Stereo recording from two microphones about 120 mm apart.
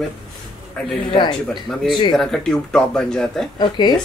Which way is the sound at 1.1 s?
40° left (ahead or behind).